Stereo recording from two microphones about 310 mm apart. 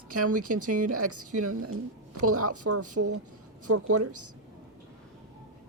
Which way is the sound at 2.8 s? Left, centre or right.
Right.